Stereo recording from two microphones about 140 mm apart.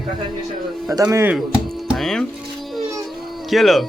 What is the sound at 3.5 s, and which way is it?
Music, centre (ahead or behind).